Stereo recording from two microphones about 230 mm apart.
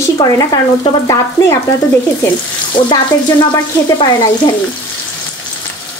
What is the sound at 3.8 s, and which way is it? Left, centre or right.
Frying, centre.